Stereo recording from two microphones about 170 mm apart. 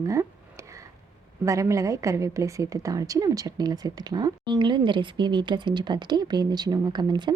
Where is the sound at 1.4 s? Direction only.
20° right (ahead or behind).